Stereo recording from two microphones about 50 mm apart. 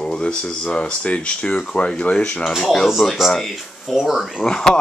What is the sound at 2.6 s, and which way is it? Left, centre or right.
Speech, centre.